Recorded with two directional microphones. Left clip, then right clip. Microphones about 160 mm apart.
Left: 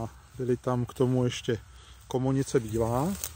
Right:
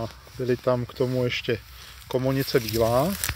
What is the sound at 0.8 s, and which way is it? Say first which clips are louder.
Speech: right 2 dB; 55° left (ahead or behind).